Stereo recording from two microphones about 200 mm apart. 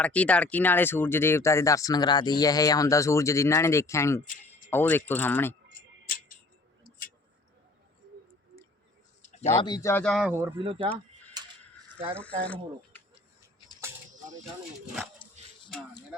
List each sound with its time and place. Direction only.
0.0 s speech: 5° left (ahead or behind)
9.6 s speech: 20° left (ahead or behind); by 10.3 s centre (ahead or behind)
10.6 s speech: 25° right (ahead or behind)
12.1 s speech: 5° left (ahead or behind)
15.4 s music: 35° right (ahead or behind)